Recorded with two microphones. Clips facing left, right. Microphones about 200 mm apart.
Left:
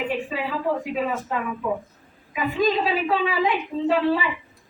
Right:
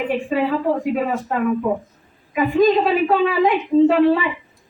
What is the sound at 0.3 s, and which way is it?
A woman's voice, 55° right (ahead or behind).